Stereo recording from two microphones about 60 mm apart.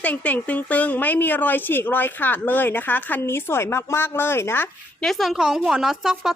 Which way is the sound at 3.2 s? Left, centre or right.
Left.